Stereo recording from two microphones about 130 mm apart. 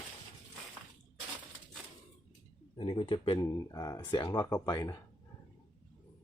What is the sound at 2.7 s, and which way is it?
Speech, 45° left (ahead or behind).